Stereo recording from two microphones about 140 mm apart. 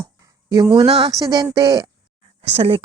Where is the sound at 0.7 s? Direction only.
40° right (ahead or behind).